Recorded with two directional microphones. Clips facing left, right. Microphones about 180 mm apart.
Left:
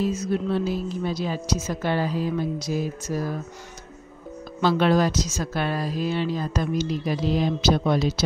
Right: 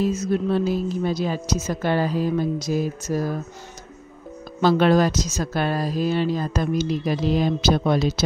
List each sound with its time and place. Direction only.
0.0 s speech: 45° right (ahead or behind)
4.6 s speech: 45° right (ahead or behind)